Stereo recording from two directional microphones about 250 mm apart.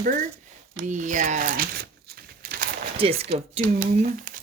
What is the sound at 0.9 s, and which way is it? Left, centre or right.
Crumpling, right.